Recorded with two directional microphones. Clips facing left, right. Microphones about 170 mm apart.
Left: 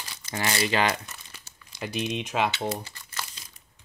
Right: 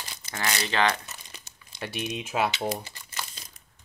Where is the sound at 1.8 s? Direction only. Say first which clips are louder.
Left 3 dB; 5° right (ahead or behind).